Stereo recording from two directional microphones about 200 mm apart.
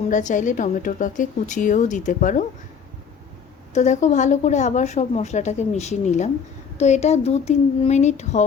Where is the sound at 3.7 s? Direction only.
35° left (ahead or behind).